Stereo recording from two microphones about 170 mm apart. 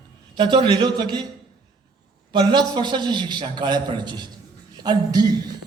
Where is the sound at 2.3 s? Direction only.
25° right (ahead or behind).